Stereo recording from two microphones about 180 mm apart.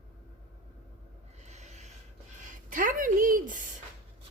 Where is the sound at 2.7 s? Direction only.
50° right (ahead or behind).